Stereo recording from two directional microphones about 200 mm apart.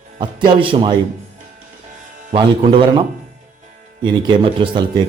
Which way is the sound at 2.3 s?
25° right (ahead or behind).